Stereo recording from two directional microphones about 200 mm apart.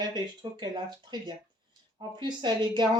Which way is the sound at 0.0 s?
20° right (ahead or behind).